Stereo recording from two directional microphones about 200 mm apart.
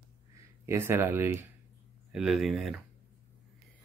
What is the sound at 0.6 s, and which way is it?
Speech, 15° right (ahead or behind).